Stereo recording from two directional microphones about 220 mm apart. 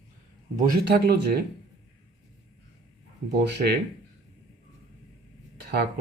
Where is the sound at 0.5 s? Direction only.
45° right (ahead or behind).